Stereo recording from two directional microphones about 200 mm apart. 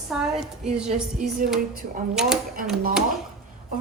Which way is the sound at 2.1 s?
5° right (ahead or behind).